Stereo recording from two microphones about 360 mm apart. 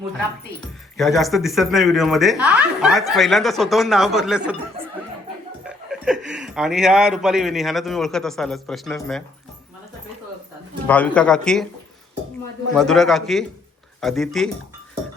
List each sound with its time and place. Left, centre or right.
0.9 s speech: centre
5.6 s speech: centre
10.8 s speech: centre
12.7 s speech: centre